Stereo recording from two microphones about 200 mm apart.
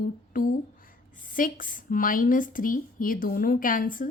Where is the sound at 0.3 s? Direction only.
45° left (ahead or behind).